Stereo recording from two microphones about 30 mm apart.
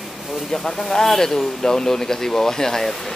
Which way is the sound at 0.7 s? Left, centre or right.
Centre.